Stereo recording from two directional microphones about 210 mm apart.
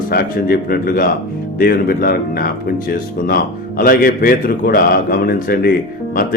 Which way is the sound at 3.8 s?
45° left (ahead or behind).